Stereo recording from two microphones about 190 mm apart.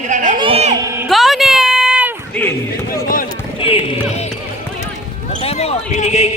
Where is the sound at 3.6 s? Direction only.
30° left (ahead or behind).